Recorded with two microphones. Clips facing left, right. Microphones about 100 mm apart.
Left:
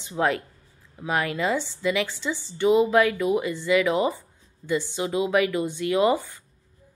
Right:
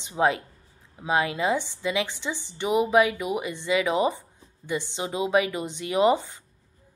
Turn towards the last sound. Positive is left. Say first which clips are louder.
# even
turn(degrees=-20)  # may be behind; listen again after turning